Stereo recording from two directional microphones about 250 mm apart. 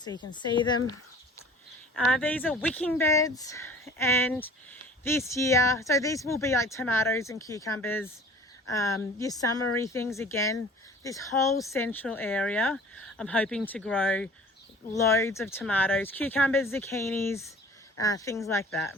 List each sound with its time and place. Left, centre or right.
0.0 s speech: centre
2.0 s speech: centre